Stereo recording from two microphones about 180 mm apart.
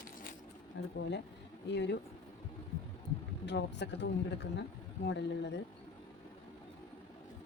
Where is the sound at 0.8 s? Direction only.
70° left (ahead or behind).